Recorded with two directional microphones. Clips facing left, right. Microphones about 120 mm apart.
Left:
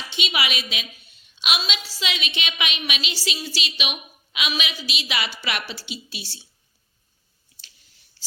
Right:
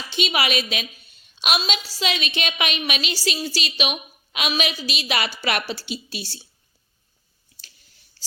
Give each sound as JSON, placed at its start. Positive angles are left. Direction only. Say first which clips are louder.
{"t": 0.1, "sound": "a woman's voice", "louder": "right 4 dB", "side_deg": -45}